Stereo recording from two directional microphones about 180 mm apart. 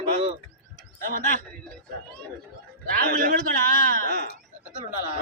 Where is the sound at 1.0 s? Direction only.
50° right (ahead or behind).